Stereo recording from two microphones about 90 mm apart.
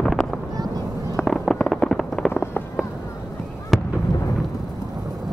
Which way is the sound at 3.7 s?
5° left (ahead or behind).